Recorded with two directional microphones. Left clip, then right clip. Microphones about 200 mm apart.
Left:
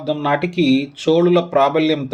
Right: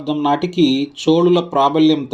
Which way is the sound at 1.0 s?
25° right (ahead or behind).